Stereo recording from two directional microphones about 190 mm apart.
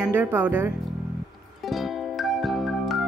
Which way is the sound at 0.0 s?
10° right (ahead or behind).